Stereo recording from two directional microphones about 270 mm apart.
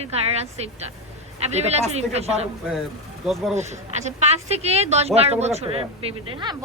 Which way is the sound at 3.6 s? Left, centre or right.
Right.